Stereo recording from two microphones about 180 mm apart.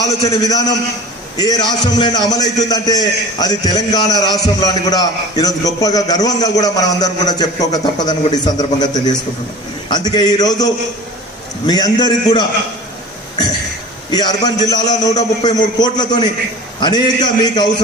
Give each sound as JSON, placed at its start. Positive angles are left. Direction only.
{"t": 0.0, "sound": "a man's voice", "side_deg": 20}
{"t": 14.1, "sound": "a man's voice", "side_deg": 20}